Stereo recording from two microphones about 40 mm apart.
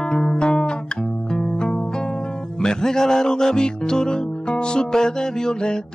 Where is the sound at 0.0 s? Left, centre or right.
Centre.